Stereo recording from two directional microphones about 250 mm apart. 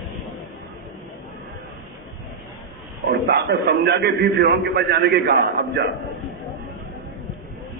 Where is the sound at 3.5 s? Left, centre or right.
Right.